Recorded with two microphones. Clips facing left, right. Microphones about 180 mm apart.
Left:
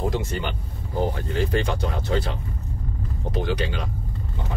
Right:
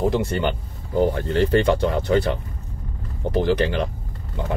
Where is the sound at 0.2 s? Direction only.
55° right (ahead or behind).